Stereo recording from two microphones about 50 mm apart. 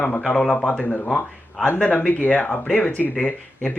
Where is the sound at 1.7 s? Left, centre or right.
Left.